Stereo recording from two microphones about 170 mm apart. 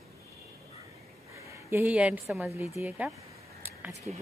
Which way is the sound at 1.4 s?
15° right (ahead or behind).